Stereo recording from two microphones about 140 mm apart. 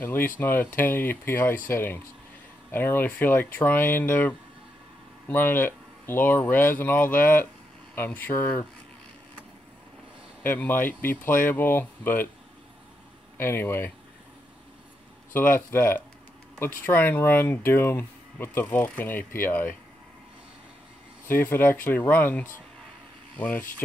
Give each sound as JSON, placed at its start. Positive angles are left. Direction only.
{"t": 0.0, "sound": "speech", "side_deg": 15}
{"t": 10.4, "sound": "speech", "side_deg": 15}
{"t": 13.4, "sound": "speech", "side_deg": 15}
{"t": 15.3, "sound": "speech", "side_deg": 15}
{"t": 21.3, "sound": "speech", "side_deg": 15}